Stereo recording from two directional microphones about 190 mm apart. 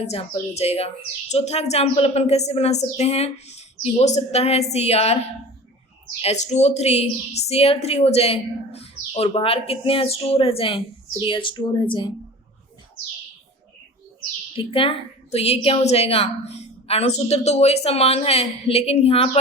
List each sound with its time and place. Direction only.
0.0 s a woman's voice: 30° left (ahead or behind)
6.2 s a woman's voice: 35° left (ahead or behind)
14.5 s a woman's voice: 30° left (ahead or behind)